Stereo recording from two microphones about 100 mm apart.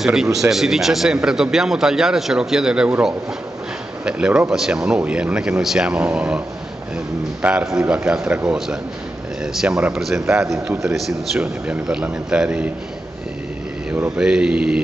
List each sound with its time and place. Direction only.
0.0 s a man's voice: 5° right (ahead or behind)
4.0 s speech: 10° right (ahead or behind)
7.4 s speech: 10° right (ahead or behind)
7.8 s a man's voice: 20° right (ahead or behind)
9.4 s a man's voice: 5° right (ahead or behind)
14.1 s speech: 10° right (ahead or behind)